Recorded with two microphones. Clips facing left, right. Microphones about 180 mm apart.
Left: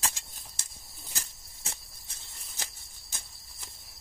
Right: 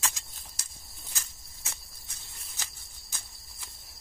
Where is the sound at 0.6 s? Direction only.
25° left (ahead or behind).